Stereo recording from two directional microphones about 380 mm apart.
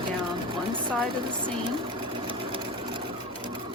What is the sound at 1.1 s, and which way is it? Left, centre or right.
Sewing machine, centre.